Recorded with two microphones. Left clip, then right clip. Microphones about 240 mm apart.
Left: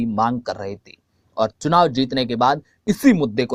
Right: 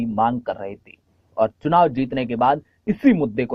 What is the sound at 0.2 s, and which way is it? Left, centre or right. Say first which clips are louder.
Speech: right 1 dB; left.